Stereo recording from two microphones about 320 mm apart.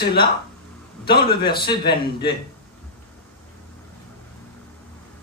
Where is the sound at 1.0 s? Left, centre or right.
Left.